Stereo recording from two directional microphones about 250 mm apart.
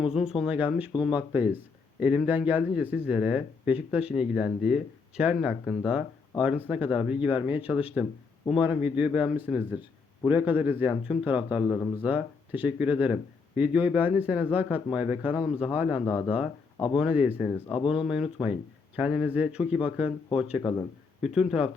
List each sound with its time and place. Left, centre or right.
0.0 s speech: centre
16.0 s speech: centre
17.0 s speech: centre
20.6 s speech: centre
21.2 s speech: centre